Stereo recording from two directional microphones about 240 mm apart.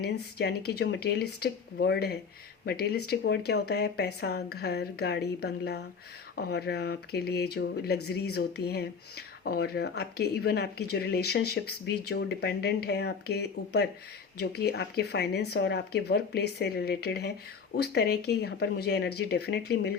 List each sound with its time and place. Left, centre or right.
0.0 s speech: left